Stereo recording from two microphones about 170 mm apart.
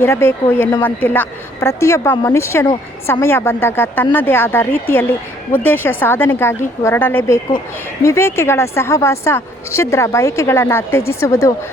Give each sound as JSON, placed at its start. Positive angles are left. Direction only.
{"t": 0.0, "sound": "a woman's voice", "side_deg": 15}